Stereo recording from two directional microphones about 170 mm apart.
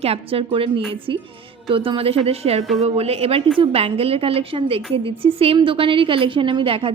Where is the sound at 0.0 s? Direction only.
35° right (ahead or behind).